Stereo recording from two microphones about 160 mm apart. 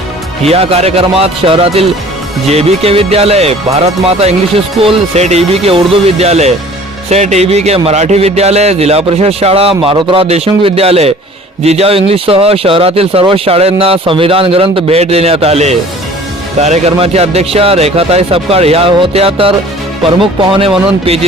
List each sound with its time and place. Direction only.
0.4 s speech: 40° right (ahead or behind)